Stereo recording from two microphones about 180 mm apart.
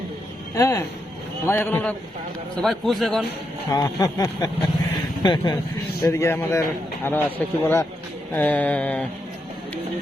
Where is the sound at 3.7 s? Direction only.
20° left (ahead or behind).